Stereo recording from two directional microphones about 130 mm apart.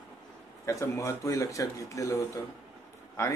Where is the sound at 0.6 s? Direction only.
25° left (ahead or behind).